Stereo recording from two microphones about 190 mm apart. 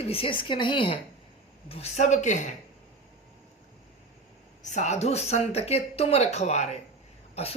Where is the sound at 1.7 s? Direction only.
35° left (ahead or behind).